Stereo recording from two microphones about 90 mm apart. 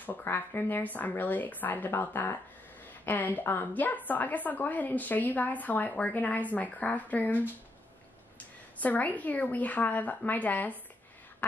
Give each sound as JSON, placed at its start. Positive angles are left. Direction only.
{"t": 0.0, "sound": "a woman's voice", "side_deg": 20}
{"t": 8.7, "sound": "a woman's voice", "side_deg": 20}